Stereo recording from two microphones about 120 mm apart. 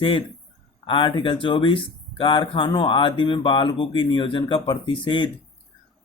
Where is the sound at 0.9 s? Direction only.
40° left (ahead or behind).